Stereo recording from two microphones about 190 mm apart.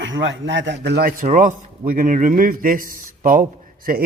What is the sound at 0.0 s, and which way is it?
A man's voice, 75° right (ahead or behind).